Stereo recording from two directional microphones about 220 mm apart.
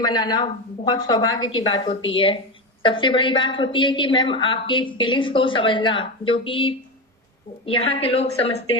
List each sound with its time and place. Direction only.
0.0 s a woman's voice: 20° left (ahead or behind)